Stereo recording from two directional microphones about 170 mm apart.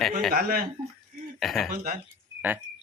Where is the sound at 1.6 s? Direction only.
55° right (ahead or behind).